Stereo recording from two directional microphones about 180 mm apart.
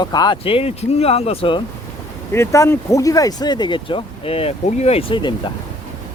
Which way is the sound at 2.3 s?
15° left (ahead or behind).